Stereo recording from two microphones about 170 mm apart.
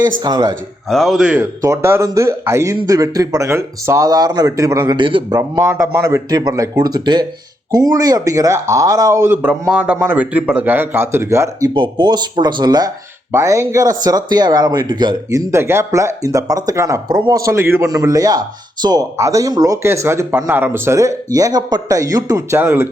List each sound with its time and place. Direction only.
0.2 s speech: 25° right (ahead or behind)
0.9 s a man's voice: centre (ahead or behind)
1.6 s a man's voice: 15° right (ahead or behind)
5.4 s a man's voice: 15° right (ahead or behind)
11.7 s speech: 30° right (ahead or behind); by 22.9 s 15° right (ahead or behind)